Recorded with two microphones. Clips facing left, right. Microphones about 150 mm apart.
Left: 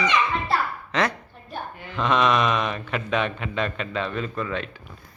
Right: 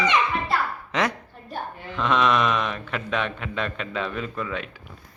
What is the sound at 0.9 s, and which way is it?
Speech, 15° right (ahead or behind).